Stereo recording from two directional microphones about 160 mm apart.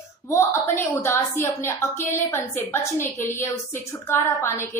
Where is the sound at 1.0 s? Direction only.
15° left (ahead or behind).